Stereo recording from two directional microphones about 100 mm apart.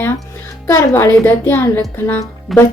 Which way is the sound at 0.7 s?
25° left (ahead or behind).